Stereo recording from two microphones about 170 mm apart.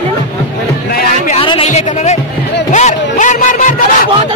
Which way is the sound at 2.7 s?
45° left (ahead or behind).